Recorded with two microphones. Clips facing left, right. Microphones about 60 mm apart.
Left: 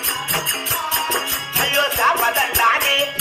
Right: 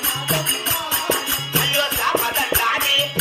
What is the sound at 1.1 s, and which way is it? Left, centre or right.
Music, left.